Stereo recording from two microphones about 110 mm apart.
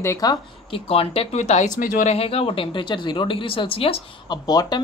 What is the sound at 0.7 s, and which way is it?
Speech, 60° left (ahead or behind).